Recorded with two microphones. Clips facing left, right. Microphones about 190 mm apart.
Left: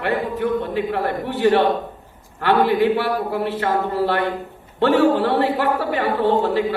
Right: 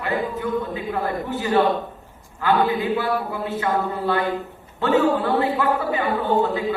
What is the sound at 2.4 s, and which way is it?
A man's voice, 70° left (ahead or behind).